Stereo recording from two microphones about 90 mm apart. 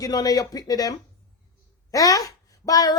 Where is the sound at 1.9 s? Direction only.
40° left (ahead or behind).